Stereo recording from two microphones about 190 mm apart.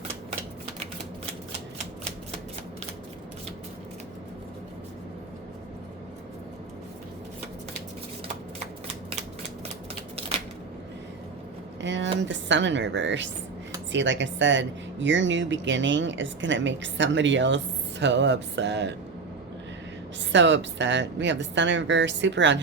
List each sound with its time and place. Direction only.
11.8 s a sound: 70° right (ahead or behind)
12.2 s speech: 75° right (ahead or behind)
20.3 s speech: 70° right (ahead or behind)